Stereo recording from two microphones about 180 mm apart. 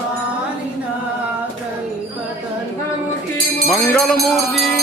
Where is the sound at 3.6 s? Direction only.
5° left (ahead or behind).